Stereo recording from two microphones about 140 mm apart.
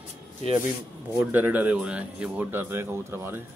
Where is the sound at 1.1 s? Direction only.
10° right (ahead or behind).